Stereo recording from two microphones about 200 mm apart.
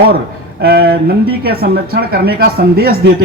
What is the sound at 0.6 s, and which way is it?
A man's voice, 55° right (ahead or behind).